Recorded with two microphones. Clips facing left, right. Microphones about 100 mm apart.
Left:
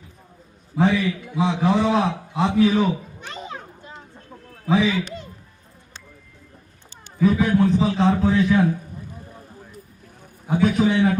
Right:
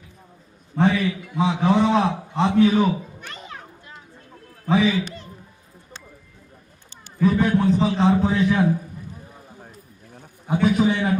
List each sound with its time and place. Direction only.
0.7 s a man's voice: 5° left (ahead or behind)
3.2 s children playing: 20° left (ahead or behind)
4.6 s speech: centre (ahead or behind)
7.2 s a man's voice: centre (ahead or behind)
10.4 s a man's voice: centre (ahead or behind)